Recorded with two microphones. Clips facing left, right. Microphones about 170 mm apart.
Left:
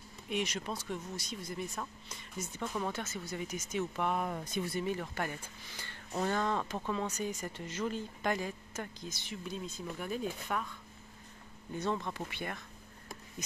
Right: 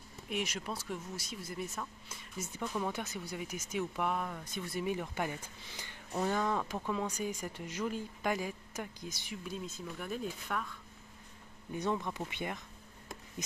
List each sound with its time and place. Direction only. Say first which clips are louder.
0.3 s speech: left 2 dB; 5° right (ahead or behind)
11.7 s speech: even; 10° right (ahead or behind)